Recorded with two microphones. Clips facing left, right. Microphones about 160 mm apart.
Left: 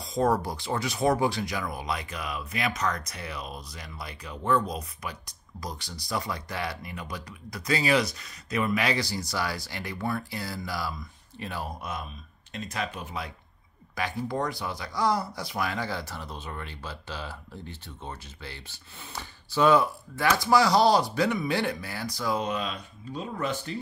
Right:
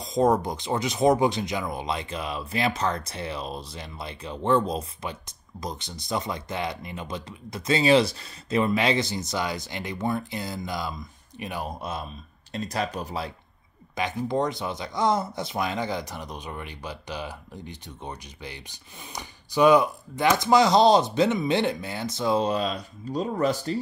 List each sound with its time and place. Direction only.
0.0 s speech: 20° right (ahead or behind)
12.5 s speech: 35° right (ahead or behind)
13.9 s speech: 20° right (ahead or behind); by 23.8 s 35° right (ahead or behind)